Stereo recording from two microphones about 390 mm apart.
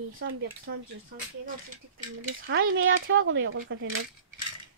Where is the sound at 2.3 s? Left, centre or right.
Right.